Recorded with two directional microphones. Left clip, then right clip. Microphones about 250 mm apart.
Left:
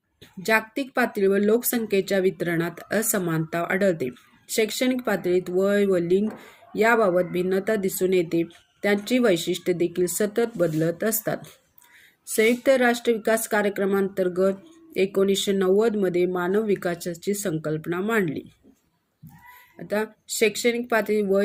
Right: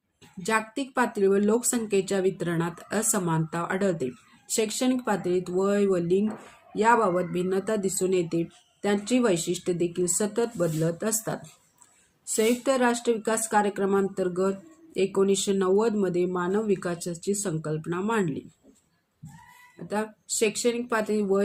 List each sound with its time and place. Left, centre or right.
0.4 s speech: centre
12.4 s speech: centre
19.9 s speech: centre